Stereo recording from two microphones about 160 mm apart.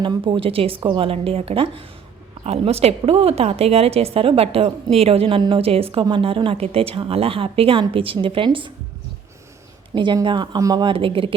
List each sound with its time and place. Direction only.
0.0 s a woman's voice: 30° right (ahead or behind)
9.9 s a woman's voice: 30° right (ahead or behind)